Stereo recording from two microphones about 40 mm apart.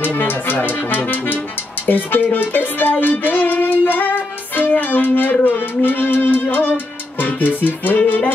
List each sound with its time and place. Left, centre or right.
0.0 s speech: left
1.9 s music: left